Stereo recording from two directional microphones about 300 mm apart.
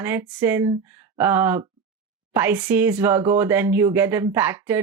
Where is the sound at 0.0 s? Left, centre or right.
Centre.